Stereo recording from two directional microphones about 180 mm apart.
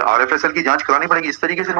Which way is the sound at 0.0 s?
50° right (ahead or behind).